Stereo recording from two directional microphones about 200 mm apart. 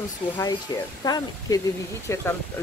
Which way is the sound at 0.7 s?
20° left (ahead or behind).